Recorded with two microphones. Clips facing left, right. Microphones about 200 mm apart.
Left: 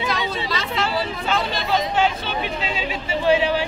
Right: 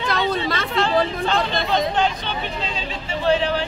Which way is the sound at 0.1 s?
55° right (ahead or behind).